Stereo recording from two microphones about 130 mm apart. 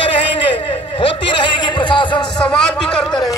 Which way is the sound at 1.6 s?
35° left (ahead or behind).